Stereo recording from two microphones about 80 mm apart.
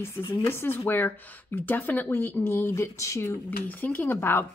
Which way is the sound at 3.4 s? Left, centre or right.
Left.